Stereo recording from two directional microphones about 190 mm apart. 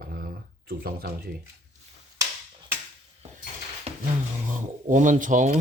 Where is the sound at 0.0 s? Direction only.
50° right (ahead or behind).